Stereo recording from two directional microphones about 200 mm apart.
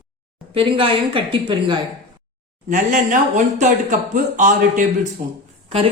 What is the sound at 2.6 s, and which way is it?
Speech, 40° right (ahead or behind).